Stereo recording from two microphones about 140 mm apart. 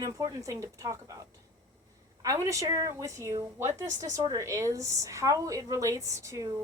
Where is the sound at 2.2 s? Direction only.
20° right (ahead or behind).